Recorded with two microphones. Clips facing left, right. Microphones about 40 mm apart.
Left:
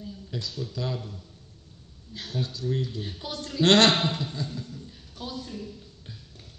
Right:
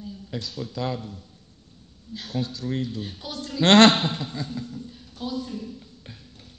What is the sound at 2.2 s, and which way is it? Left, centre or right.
Speech, right.